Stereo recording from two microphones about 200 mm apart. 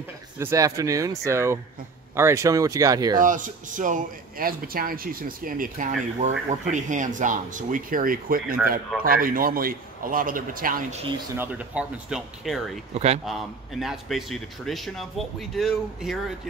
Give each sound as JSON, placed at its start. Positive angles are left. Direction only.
{"t": 0.4, "sound": "speech", "side_deg": -15}
{"t": 3.2, "sound": "a man's voice", "side_deg": -40}
{"t": 11.3, "sound": "a man's voice", "side_deg": -10}
{"t": 12.9, "sound": "a man's voice", "side_deg": -35}
{"t": 13.2, "sound": "a man's voice", "side_deg": 0}